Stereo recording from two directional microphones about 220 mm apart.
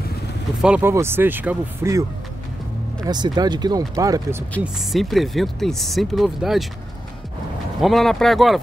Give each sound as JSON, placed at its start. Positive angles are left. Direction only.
{"t": 0.6, "sound": "speech", "side_deg": -5}
{"t": 3.1, "sound": "speech", "side_deg": -20}
{"t": 4.6, "sound": "speech", "side_deg": 0}
{"t": 7.8, "sound": "speech", "side_deg": 0}